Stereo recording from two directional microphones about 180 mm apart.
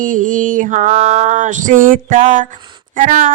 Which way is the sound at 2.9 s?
45° right (ahead or behind).